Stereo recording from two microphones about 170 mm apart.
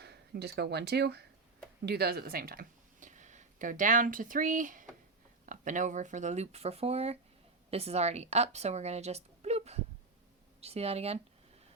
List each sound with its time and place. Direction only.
0.0 s a woman's voice: 75° right (ahead or behind); by 11.2 s 35° right (ahead or behind)